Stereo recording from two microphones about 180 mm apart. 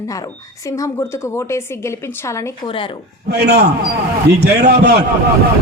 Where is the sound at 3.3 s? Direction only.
65° right (ahead or behind).